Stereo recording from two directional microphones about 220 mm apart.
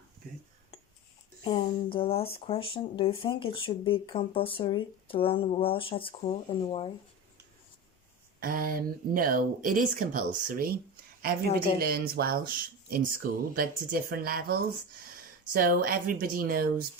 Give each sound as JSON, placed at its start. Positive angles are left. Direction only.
{"t": 1.5, "sound": "speech", "side_deg": 25}
{"t": 8.4, "sound": "speech", "side_deg": -40}
{"t": 11.8, "sound": "speech", "side_deg": -45}